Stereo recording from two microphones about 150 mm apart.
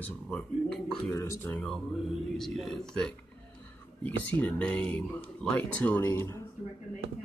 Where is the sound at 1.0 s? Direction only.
20° left (ahead or behind).